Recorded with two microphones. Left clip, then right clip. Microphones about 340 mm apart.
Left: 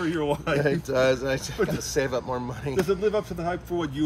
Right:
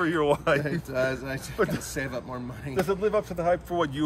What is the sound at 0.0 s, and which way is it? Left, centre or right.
Speech, centre.